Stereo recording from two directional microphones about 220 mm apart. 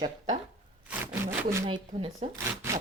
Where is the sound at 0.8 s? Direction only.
10° right (ahead or behind).